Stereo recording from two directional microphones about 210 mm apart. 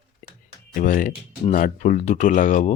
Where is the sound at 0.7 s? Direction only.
40° left (ahead or behind).